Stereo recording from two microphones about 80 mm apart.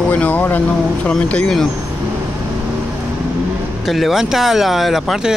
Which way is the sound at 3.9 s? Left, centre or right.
Centre.